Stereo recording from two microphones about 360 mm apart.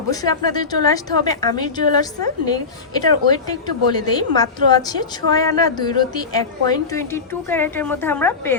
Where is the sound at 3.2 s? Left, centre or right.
Centre.